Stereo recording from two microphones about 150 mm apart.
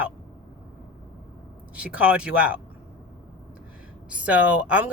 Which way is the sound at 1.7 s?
10° right (ahead or behind).